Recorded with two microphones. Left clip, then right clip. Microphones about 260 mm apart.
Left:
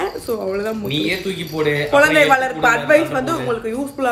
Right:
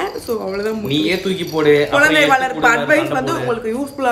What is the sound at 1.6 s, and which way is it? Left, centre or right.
Speech, centre.